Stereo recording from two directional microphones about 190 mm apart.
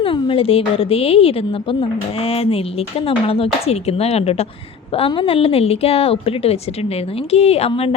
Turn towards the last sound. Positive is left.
turn(degrees=30)  # may be behind; listen again after turning